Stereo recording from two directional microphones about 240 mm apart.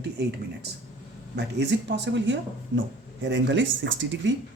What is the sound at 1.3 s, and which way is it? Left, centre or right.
A woman's voice, right.